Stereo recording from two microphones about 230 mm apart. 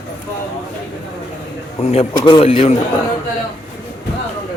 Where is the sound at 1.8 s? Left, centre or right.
Left.